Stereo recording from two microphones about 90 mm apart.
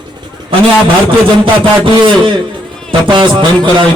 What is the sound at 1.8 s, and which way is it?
Speech, 65° right (ahead or behind).